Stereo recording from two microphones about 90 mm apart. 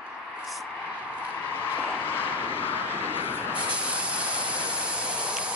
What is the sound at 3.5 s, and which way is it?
Hiss, 15° right (ahead or behind).